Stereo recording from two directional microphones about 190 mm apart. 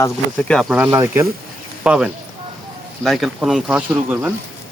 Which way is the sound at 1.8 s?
5° right (ahead or behind).